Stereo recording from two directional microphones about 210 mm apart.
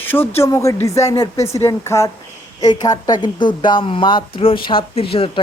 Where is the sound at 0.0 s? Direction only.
10° left (ahead or behind).